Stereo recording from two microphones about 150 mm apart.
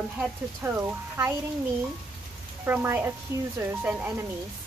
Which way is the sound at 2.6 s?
15° right (ahead or behind).